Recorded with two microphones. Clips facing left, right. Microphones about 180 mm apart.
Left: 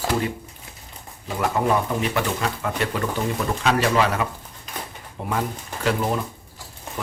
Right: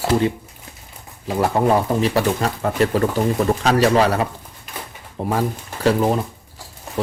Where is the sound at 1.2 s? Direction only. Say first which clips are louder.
Right 5 dB; 35° right (ahead or behind).